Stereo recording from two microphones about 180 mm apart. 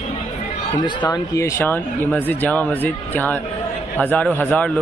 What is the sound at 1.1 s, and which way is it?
A man's voice, 20° left (ahead or behind).